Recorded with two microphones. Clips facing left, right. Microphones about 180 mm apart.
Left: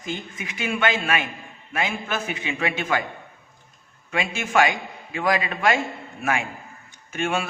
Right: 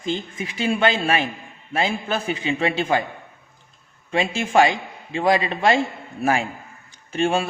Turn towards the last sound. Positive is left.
turn(degrees=-30)  # may be behind; listen again after turning